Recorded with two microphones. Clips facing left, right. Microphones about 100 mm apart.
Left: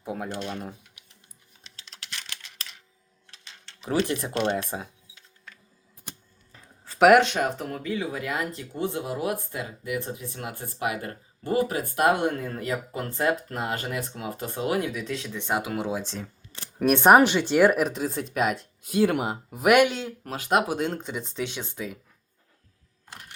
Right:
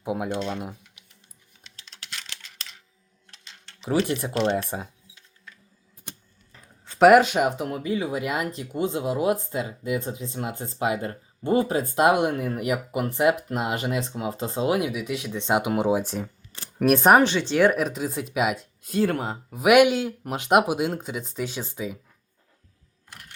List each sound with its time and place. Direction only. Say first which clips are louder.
0.0 s speech: right 5 dB; 20° right (ahead or behind)
3.8 s speech: right 2 dB; 15° right (ahead or behind)
4.7 s speech: right 2 dB; centre (ahead or behind)
6.8 s speech: right 2 dB; centre (ahead or behind)
16.8 s speech: even; centre (ahead or behind)
20.3 s speech: right 4 dB; 20° right (ahead or behind); by 21.9 s 5° right (ahead or behind)